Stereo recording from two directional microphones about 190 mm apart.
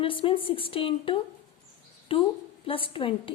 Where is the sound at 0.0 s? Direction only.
30° left (ahead or behind).